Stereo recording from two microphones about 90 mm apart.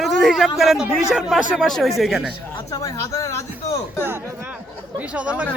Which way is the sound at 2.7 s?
40° left (ahead or behind).